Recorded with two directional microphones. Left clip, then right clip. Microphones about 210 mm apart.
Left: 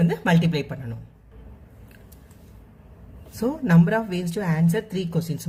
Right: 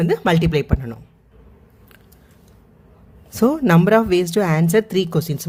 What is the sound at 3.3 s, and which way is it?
Speech, 55° right (ahead or behind).